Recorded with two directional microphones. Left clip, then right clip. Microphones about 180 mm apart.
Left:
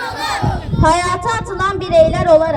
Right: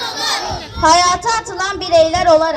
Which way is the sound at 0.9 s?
65° left (ahead or behind).